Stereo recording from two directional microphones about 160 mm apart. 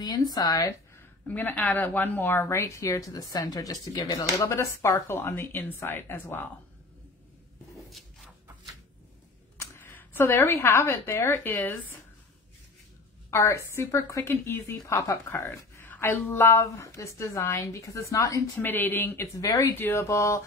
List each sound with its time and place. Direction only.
0.0 s speech: 25° left (ahead or behind)
1.2 s a woman's voice: 10° left (ahead or behind)
9.6 s speech: 15° left (ahead or behind)
13.3 s a woman's voice: 20° left (ahead or behind)